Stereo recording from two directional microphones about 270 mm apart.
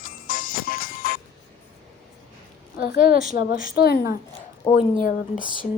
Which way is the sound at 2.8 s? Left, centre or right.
Left.